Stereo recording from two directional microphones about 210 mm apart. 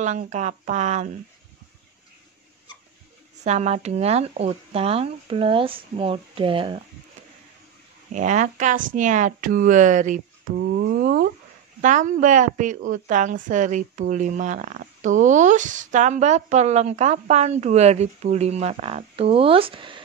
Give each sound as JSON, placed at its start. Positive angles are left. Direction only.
{"t": 0.0, "sound": "a woman's voice", "side_deg": -35}
{"t": 3.4, "sound": "speech", "side_deg": -30}
{"t": 8.1, "sound": "a woman's voice", "side_deg": -35}
{"t": 10.6, "sound": "a sound", "side_deg": -50}
{"t": 11.8, "sound": "a woman's voice", "side_deg": -35}